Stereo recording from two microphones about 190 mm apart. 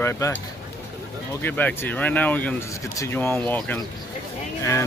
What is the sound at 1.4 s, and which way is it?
Speech, 10° left (ahead or behind).